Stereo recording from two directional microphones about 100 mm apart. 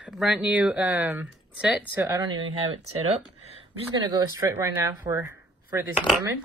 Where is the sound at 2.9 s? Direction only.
90° right.